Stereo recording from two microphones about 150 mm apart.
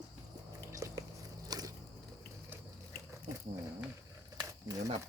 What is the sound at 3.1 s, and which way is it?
Biting, 20° right (ahead or behind).